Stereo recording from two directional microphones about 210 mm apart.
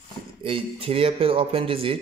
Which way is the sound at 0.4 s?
25° right (ahead or behind).